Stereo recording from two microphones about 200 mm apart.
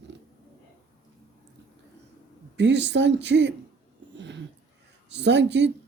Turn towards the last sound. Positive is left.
turn(degrees=-60)  # may be behind; listen again after turning